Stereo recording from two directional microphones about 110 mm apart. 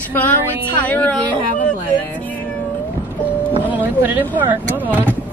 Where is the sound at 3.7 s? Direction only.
15° right (ahead or behind).